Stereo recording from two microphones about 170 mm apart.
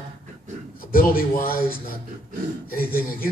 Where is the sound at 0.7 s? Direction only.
55° left (ahead or behind).